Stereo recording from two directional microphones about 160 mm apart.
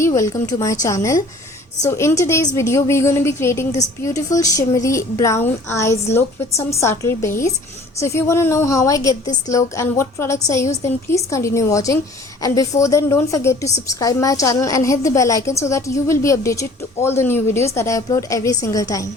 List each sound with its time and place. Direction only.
0.0 s a woman's voice: 20° left (ahead or behind)